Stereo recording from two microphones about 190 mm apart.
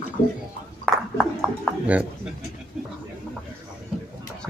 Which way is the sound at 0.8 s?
Centre (ahead or behind).